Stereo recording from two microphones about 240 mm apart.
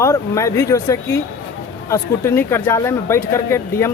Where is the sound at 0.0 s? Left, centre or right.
Centre.